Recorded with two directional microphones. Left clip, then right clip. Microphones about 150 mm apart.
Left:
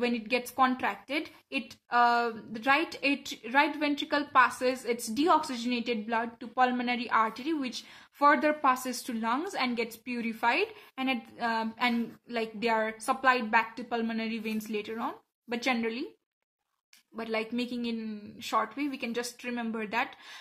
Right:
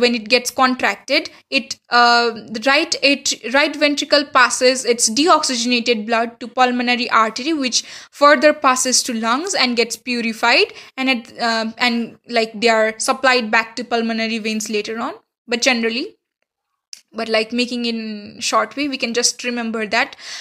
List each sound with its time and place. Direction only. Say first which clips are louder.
0.0 s a woman's voice: right 15 dB; 30° right (ahead or behind)
17.1 s a woman's voice: right 14 dB; 35° right (ahead or behind)